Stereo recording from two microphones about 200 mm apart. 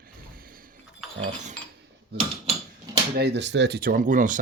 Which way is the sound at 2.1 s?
55° right (ahead or behind).